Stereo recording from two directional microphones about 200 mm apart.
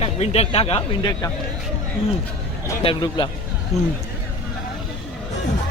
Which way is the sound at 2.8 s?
25° left (ahead or behind).